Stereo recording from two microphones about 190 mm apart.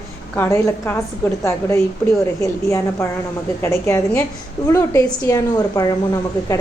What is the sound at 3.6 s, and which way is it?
A woman's voice, 15° left (ahead or behind).